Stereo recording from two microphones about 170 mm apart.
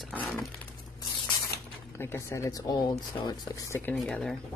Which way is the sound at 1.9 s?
15° left (ahead or behind).